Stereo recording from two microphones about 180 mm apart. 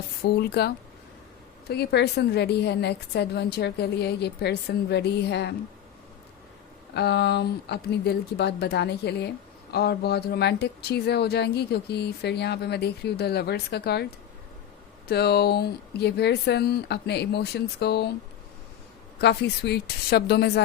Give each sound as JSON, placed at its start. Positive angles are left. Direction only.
{"t": 0.2, "sound": "speech", "side_deg": 65}
{"t": 1.7, "sound": "a woman's voice", "side_deg": 65}
{"t": 6.9, "sound": "a woman's voice", "side_deg": 65}
{"t": 19.2, "sound": "speech", "side_deg": 65}